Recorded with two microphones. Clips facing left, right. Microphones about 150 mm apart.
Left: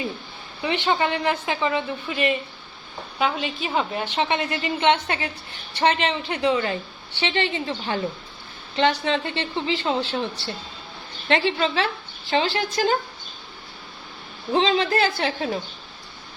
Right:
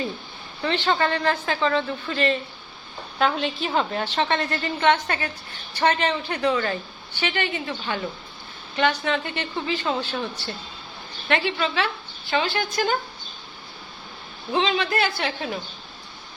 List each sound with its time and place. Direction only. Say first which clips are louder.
0.6 s a woman's voice: even; 15° left (ahead or behind); by 13.0 s 30° left (ahead or behind)
14.5 s a woman's voice: left 3 dB; 35° left (ahead or behind)